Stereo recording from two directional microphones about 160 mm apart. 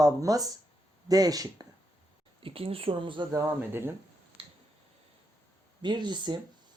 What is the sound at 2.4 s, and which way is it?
Speech, 35° right (ahead or behind).